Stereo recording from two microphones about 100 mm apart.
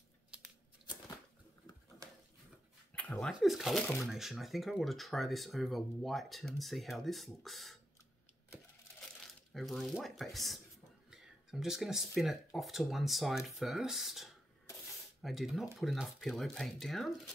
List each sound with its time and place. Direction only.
2.0 s a sound: 35° right (ahead or behind)
2.9 s dog: 15° left (ahead or behind)
3.3 s speech: centre (ahead or behind)
9.0 s speech: centre (ahead or behind)